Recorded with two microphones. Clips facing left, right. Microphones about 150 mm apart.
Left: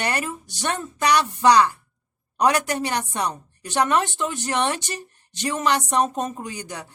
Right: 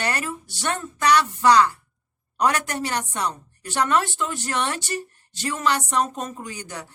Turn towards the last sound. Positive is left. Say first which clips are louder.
# left 2 dB
turn(degrees=15)  # may be behind; listen again after turning